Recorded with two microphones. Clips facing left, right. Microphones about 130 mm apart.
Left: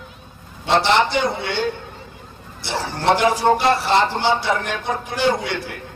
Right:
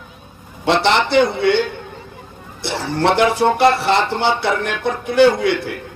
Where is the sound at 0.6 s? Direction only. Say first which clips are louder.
Right 1 dB; 60° right (ahead or behind).